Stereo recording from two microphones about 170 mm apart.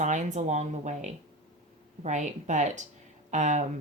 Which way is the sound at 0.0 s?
45° right (ahead or behind).